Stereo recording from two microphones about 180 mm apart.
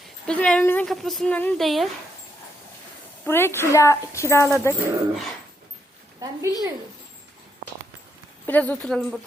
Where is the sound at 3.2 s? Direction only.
15° left (ahead or behind).